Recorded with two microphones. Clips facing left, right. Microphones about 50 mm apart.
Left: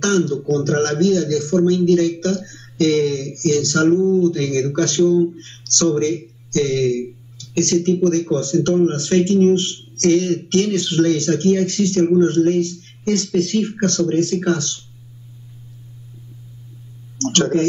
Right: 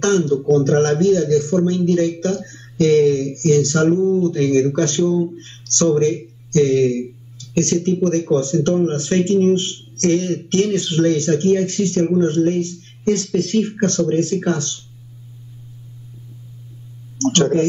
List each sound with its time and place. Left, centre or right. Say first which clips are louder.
0.0 s a man's voice: right 2 dB; right
13.3 s speech: even; centre
13.7 s speech: even; right
17.2 s speech: right 4 dB; left